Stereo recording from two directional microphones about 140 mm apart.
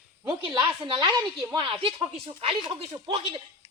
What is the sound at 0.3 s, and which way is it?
A man's voice, 35° right (ahead or behind).